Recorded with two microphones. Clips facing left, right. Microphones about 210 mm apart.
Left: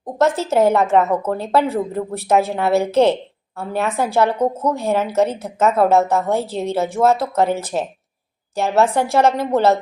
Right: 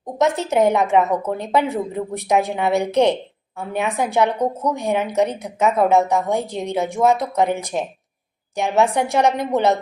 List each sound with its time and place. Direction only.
0.3 s a woman's voice: 15° right (ahead or behind)